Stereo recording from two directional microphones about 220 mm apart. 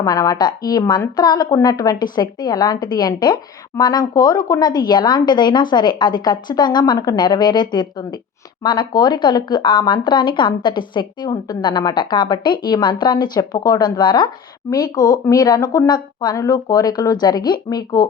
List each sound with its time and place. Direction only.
0.0 s a woman's voice: 15° left (ahead or behind)